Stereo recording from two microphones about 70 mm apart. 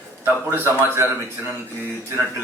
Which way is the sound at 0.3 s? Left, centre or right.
Right.